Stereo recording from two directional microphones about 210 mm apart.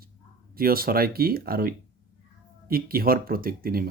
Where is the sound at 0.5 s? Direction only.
45° right (ahead or behind).